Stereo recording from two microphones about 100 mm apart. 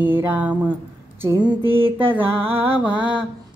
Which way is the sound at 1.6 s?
65° right (ahead or behind).